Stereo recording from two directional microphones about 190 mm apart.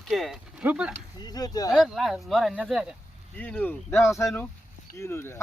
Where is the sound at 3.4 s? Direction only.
10° left (ahead or behind).